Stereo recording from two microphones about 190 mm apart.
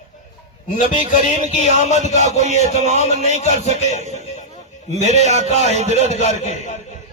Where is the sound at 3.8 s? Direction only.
35° left (ahead or behind).